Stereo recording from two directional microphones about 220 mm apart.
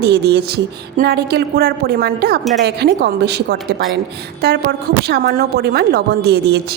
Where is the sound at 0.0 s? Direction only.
50° right (ahead or behind).